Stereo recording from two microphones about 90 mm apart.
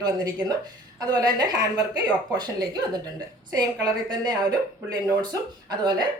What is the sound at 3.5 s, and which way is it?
A woman's voice, 50° right (ahead or behind).